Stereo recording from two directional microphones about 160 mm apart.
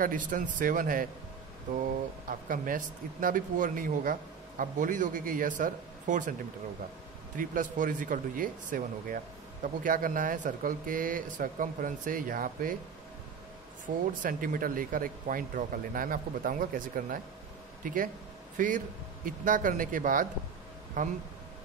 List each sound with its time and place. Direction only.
0.0 s speech: 55° right (ahead or behind)
2.4 s speech: 60° right (ahead or behind)
7.3 s speech: 55° right (ahead or behind)
13.9 s a man's voice: 65° right (ahead or behind)